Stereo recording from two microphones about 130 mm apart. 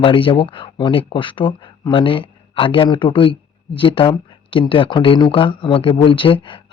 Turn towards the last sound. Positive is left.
turn(degrees=40)  # may be behind; listen again after turning